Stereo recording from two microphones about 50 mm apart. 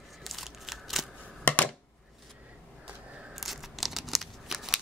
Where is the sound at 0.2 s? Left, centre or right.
Centre.